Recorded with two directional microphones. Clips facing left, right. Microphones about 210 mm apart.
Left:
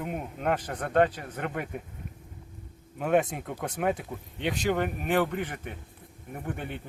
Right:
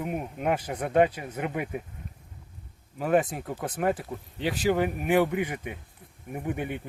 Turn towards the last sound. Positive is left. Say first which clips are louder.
# right 4 dB
turn(degrees=-10)  # may be behind; listen again after turning